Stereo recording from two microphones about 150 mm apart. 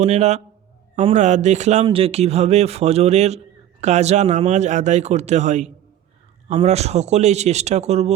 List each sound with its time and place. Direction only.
0.0 s speech: 50° right (ahead or behind)
6.5 s speech: 40° right (ahead or behind)